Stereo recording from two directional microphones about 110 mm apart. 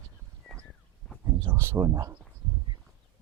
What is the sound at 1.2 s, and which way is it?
Speech, 20° right (ahead or behind).